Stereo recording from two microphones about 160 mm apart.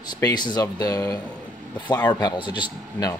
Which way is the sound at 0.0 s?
25° left (ahead or behind).